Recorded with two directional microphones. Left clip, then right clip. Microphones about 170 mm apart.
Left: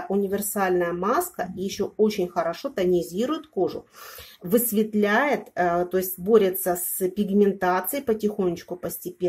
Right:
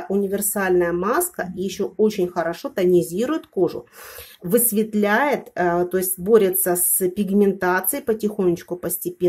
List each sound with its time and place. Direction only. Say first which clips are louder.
0.1 s speech: right 3 dB; 20° right (ahead or behind)